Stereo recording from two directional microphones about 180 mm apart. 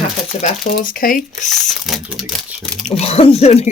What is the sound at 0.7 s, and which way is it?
Speech, 50° left (ahead or behind).